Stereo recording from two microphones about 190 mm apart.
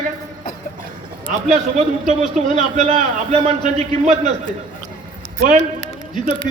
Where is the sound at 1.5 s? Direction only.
40° right (ahead or behind).